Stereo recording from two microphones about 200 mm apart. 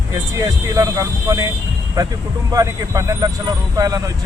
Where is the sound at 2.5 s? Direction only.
15° right (ahead or behind).